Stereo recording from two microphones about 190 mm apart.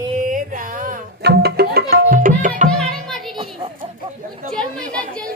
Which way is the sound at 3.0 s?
Centre (ahead or behind).